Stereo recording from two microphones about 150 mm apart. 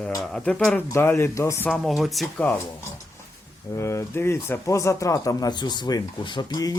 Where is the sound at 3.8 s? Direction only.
20° left (ahead or behind).